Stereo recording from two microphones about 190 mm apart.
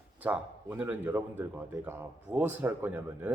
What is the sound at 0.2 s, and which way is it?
Speech, 10° right (ahead or behind).